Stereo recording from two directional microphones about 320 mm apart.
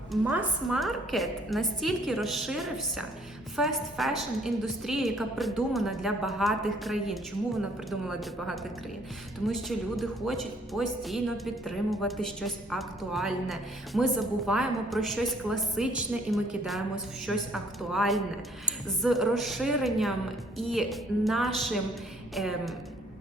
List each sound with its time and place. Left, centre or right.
0.1 s speech: centre